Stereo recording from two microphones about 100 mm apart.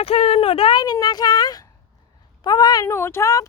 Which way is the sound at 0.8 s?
45° left (ahead or behind).